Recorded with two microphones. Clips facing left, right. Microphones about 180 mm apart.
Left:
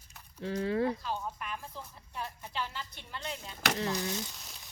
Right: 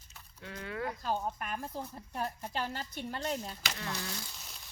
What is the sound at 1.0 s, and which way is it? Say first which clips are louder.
A woman's voice: right 3 dB; 45° right (ahead or behind).